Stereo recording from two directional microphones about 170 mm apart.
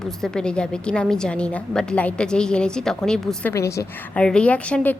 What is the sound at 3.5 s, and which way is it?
Speech, 15° left (ahead or behind).